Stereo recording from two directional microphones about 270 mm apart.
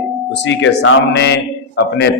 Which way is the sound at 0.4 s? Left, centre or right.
Left.